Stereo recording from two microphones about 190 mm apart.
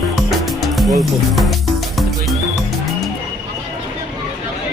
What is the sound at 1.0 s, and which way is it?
Speech, centre (ahead or behind).